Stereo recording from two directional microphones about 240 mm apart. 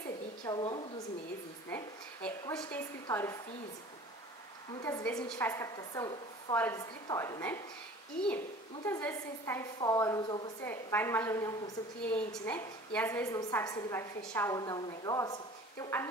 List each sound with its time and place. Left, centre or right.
0.5 s a woman's voice: centre
2.2 s a woman's voice: centre
4.7 s a woman's voice: centre
8.8 s a woman's voice: centre